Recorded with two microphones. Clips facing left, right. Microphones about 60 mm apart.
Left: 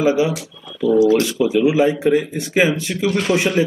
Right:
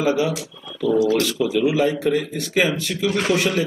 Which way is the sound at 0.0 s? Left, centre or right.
Left.